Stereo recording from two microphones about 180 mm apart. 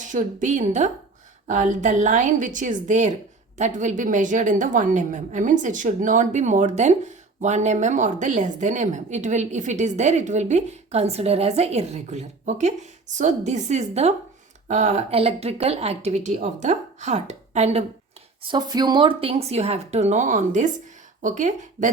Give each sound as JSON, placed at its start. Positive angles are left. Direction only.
{"t": 0.1, "sound": "a woman's voice", "side_deg": -45}
{"t": 18.4, "sound": "a woman's voice", "side_deg": -25}